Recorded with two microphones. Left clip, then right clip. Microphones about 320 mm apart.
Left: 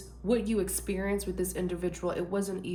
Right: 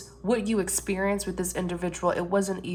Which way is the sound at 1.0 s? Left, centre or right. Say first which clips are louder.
Right 3 dB; centre.